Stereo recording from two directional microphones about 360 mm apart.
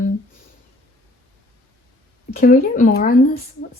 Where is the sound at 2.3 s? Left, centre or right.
Left.